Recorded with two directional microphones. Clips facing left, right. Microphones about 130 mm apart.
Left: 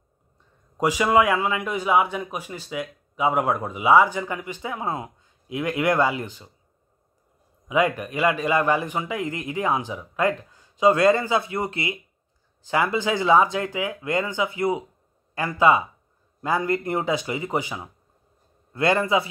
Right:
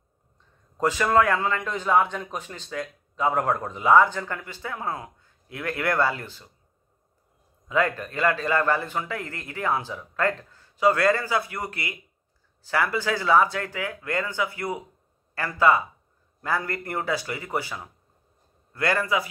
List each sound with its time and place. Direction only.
0.7 s a man's voice: 10° left (ahead or behind)
7.6 s a man's voice: 15° left (ahead or behind)